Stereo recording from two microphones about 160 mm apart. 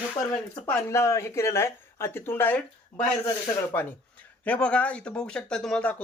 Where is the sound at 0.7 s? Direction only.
15° left (ahead or behind).